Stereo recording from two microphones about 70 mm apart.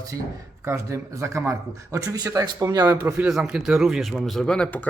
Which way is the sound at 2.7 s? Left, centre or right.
Right.